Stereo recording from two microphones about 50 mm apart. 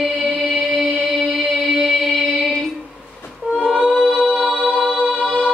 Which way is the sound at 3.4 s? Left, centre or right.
Right.